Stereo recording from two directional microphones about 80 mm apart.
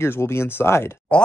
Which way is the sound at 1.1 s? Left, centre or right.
Centre.